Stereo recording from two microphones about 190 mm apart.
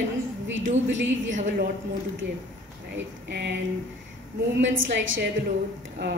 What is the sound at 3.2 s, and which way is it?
Speech, 65° right (ahead or behind).